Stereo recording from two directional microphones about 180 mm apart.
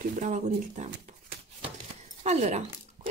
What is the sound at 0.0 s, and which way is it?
Speech, 45° right (ahead or behind).